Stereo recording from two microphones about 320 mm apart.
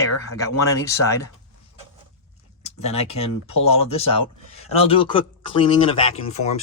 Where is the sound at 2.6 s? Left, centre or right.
Centre.